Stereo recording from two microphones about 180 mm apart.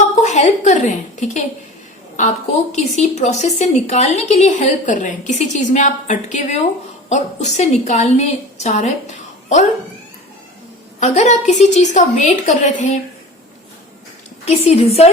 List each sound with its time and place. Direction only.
0.2 s a woman's voice: 40° left (ahead or behind)
11.0 s a woman's voice: 40° left (ahead or behind)
14.4 s a woman's voice: 35° left (ahead or behind)